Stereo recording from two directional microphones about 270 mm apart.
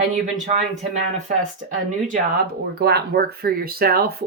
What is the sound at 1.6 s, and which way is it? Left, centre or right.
Speech, right.